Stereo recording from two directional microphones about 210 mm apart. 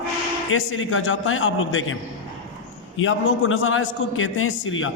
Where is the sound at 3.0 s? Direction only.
70° left (ahead or behind).